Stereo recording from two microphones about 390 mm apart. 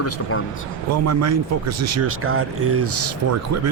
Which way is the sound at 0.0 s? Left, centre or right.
Left.